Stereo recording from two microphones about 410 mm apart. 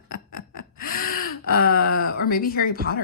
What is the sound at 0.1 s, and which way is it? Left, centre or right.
Gasp, centre.